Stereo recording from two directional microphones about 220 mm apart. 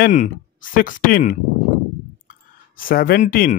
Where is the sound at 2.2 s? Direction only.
40° left (ahead or behind).